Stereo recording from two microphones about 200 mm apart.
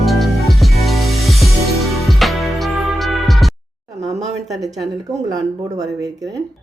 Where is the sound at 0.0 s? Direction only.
Centre (ahead or behind).